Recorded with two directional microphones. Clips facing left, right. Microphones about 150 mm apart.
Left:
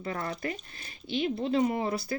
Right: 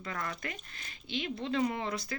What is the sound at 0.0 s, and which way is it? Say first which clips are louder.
Speech: left 5 dB; 30° left (ahead or behind).